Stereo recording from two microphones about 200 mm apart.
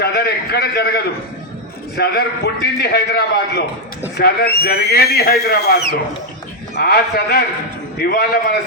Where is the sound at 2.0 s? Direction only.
55° left (ahead or behind).